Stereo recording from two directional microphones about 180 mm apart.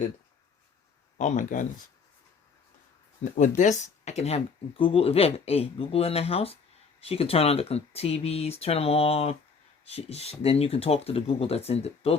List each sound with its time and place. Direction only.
1.2 s speech: 45° left (ahead or behind)
3.6 s speech: 40° left (ahead or behind)